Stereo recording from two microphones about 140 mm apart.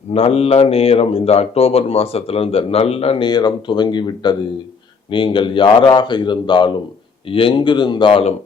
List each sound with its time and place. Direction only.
0.1 s speech: 45° left (ahead or behind)
3.2 s speech: 30° left (ahead or behind)